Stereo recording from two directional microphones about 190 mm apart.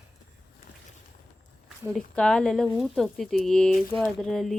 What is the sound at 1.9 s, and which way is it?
Speech, 5° left (ahead or behind).